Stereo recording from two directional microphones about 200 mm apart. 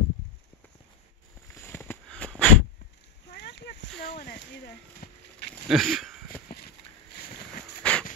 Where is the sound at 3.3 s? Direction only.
60° left (ahead or behind).